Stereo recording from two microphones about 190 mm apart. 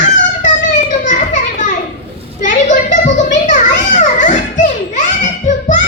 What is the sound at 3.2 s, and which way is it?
Children playing, 40° left (ahead or behind).